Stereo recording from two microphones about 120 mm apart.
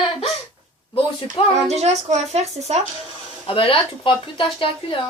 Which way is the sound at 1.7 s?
65° right (ahead or behind).